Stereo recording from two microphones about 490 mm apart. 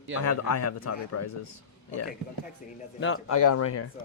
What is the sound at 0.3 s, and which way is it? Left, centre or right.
Speech, left.